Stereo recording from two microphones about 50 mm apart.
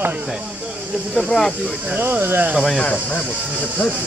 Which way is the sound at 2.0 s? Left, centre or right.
Right.